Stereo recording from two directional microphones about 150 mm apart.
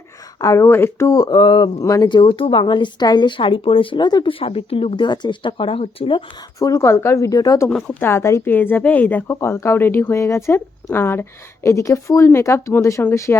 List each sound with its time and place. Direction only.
0.4 s speech: 20° left (ahead or behind); by 6.2 s 35° left (ahead or behind)
6.6 s speech: 20° left (ahead or behind)
7.7 s speech: 5° left (ahead or behind)